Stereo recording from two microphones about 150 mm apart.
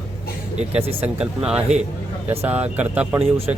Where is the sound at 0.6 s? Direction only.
45° right (ahead or behind).